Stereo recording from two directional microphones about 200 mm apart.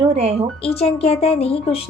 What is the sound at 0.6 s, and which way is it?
Speech, 30° left (ahead or behind).